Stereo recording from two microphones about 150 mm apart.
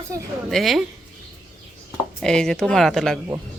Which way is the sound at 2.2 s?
5° left (ahead or behind).